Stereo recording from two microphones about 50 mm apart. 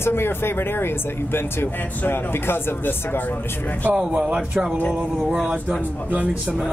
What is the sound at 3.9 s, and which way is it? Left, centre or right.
Speech, right.